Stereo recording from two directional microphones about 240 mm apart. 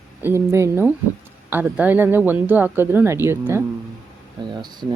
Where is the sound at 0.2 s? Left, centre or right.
Centre.